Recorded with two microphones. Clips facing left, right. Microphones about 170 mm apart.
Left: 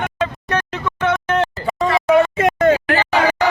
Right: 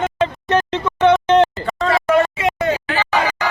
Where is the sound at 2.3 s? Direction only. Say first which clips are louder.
Left 5 dB; 50° left (ahead or behind).